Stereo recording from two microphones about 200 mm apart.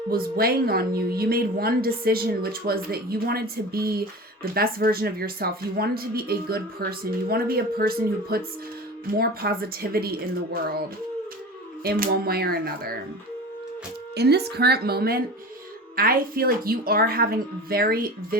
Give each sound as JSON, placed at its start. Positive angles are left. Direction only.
{"t": 0.1, "sound": "a woman's voice", "side_deg": -50}
{"t": 11.8, "sound": "a woman's voice", "side_deg": -50}
{"t": 14.2, "sound": "a woman's voice", "side_deg": -55}